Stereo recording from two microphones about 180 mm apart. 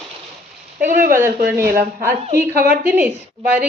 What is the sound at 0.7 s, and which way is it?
A woman's voice, 10° right (ahead or behind).